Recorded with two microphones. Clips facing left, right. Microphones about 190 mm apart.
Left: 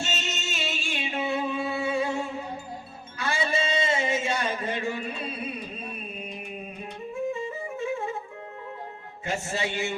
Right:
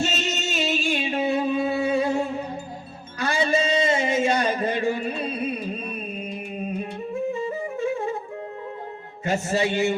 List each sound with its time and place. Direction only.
0.0 s music: 40° right (ahead or behind)
3.2 s a sound: 40° right (ahead or behind)
7.3 s music: 40° right (ahead or behind)
9.2 s music: 40° right (ahead or behind)